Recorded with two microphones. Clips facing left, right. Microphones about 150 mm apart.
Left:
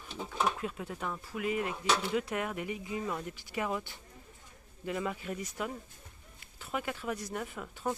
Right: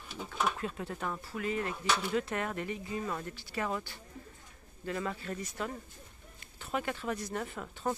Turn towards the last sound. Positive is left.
turn(degrees=5)  # may be behind; listen again after turning